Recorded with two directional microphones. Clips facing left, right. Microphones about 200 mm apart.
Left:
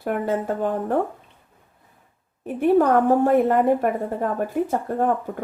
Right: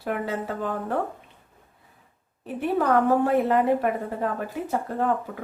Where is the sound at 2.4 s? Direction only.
45° left (ahead or behind).